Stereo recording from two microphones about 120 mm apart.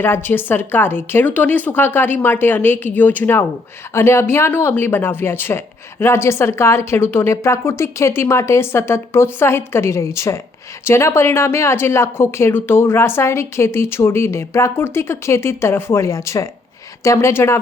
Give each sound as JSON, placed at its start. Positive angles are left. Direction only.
{"t": 0.0, "sound": "speech", "side_deg": 15}